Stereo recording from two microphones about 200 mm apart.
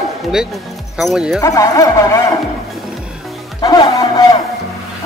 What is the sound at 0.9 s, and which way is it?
Speech, centre (ahead or behind).